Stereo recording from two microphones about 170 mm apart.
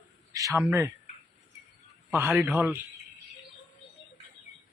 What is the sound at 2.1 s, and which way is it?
Speech, 10° right (ahead or behind).